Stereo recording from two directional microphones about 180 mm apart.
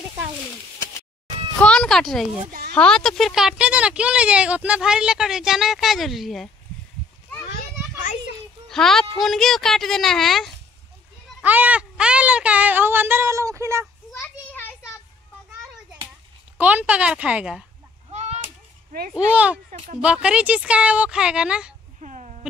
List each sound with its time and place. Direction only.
1.6 s a sound: 5° left (ahead or behind)
2.7 s speech: 5° left (ahead or behind)
8.6 s speech: centre (ahead or behind); by 13.8 s 15° right (ahead or behind)
14.5 s a sound: 10° left (ahead or behind)
16.5 s speech: 10° right (ahead or behind)
18.1 s whip: 35° right (ahead or behind)
18.9 s speech: 50° right (ahead or behind)
19.1 s speech: 5° right (ahead or behind)
22.0 s a sound: 40° right (ahead or behind)